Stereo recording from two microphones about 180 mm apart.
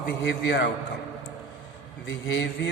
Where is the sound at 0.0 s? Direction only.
70° left (ahead or behind).